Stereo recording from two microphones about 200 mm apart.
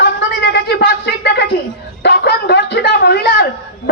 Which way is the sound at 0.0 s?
60° left (ahead or behind).